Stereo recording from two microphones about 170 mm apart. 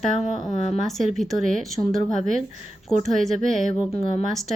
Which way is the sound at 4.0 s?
30° left (ahead or behind).